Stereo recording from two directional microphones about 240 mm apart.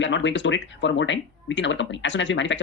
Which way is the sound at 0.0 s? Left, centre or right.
Left.